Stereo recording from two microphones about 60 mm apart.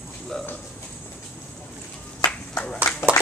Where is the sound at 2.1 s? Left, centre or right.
Left.